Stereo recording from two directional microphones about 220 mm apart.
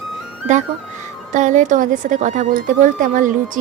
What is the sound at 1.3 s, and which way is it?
Speech, 35° right (ahead or behind).